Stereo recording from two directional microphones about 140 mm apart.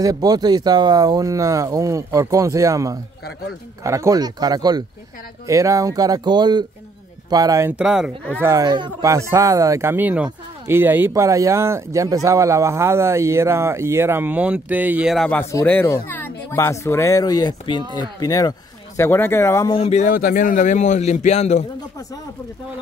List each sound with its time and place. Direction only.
0.0 s speech: 25° right (ahead or behind)
7.7 s speech: 5° right (ahead or behind)
8.4 s speech: 20° right (ahead or behind)
8.6 s speech: 35° right (ahead or behind)
9.0 s speech: 20° right (ahead or behind)
15.1 s speech: 10° left (ahead or behind); by 18.5 s 25° left (ahead or behind)
18.9 s speech: 15° left (ahead or behind)
19.7 s speech: 50° left (ahead or behind)
20.1 s speech: 75° left (ahead or behind); by 21.6 s 55° left (ahead or behind)